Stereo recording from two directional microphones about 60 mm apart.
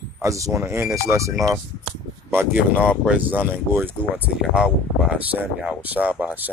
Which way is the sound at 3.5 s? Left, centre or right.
Right.